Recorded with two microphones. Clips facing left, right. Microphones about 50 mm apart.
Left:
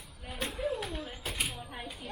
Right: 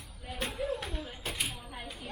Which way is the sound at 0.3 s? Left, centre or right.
Centre.